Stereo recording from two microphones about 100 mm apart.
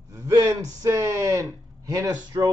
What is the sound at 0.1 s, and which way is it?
Speech, 30° right (ahead or behind).